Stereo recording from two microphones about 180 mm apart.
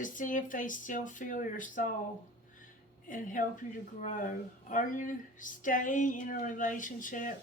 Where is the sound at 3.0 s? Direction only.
45° left (ahead or behind).